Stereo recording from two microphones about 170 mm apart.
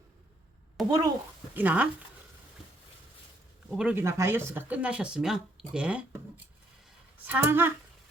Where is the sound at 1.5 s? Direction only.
10° right (ahead or behind).